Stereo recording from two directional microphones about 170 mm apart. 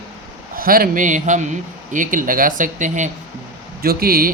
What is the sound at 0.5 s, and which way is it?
A man's voice, 60° right (ahead or behind).